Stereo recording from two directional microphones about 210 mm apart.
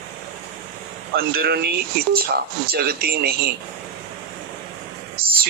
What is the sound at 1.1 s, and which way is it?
Speech, 45° right (ahead or behind).